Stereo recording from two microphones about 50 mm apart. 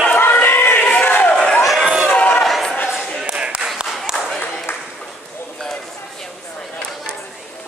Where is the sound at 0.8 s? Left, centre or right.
Left.